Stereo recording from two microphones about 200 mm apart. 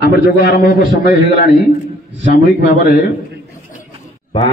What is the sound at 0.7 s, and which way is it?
Speech, 50° left (ahead or behind).